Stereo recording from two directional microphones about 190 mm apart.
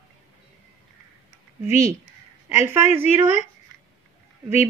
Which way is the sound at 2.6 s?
10° right (ahead or behind).